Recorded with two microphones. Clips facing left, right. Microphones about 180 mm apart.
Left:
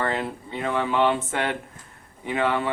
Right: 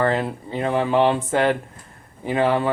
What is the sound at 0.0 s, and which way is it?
Speech, 35° right (ahead or behind).